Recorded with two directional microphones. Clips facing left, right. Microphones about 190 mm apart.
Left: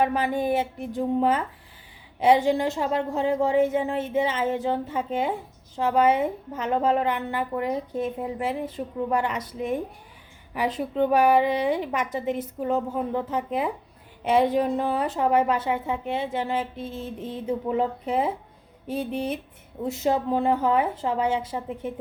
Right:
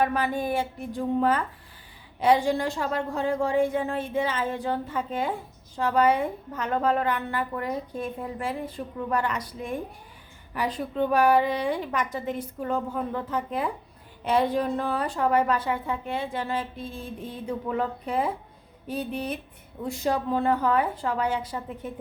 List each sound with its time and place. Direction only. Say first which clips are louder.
0.0 s a woman's voice: left 2 dB; 20° left (ahead or behind)